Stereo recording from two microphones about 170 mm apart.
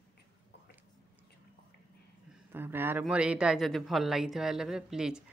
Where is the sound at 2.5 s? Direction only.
10° right (ahead or behind).